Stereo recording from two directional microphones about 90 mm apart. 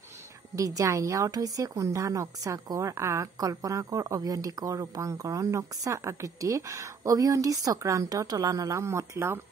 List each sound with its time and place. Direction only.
0.6 s a woman's voice: 40° right (ahead or behind)